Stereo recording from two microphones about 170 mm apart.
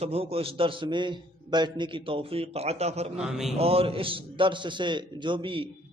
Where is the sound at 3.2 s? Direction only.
5° right (ahead or behind).